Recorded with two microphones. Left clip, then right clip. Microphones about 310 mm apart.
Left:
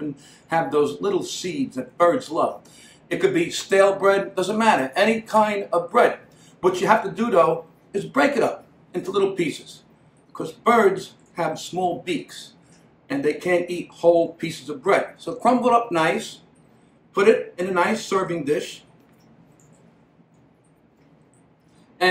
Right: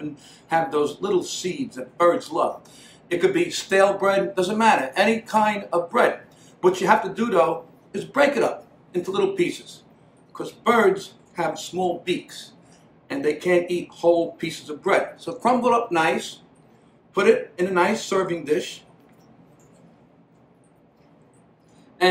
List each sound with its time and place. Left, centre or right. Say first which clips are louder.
0.2 s speech: right 1 dB; centre